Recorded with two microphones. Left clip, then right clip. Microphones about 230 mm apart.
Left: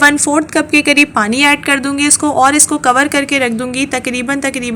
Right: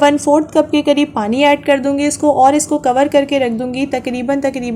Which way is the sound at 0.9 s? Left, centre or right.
Centre.